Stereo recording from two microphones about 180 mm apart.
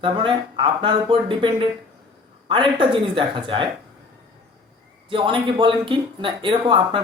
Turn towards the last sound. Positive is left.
turn(degrees=-25)  # may be behind; listen again after turning